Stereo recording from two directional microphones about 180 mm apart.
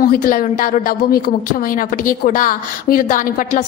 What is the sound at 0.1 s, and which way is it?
A woman's voice, 50° left (ahead or behind).